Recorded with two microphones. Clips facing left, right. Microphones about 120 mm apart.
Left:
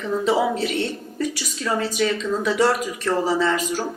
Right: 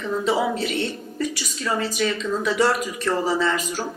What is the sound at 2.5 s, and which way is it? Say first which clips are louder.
Speech: left 1 dB; 30° left (ahead or behind).